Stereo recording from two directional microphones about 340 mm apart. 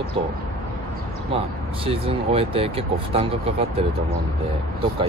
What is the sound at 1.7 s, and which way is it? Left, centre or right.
Speech, centre.